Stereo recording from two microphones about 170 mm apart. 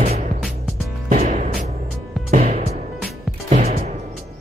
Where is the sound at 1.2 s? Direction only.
50° right (ahead or behind).